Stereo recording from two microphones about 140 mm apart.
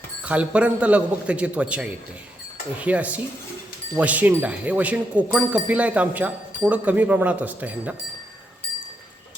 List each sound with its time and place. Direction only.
0.3 s speech: 10° right (ahead or behind)